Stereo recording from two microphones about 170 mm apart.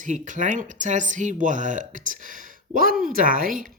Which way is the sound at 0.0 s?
50° right (ahead or behind).